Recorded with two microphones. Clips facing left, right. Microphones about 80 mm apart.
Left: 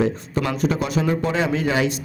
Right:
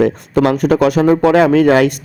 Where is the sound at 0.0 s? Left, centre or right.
Right.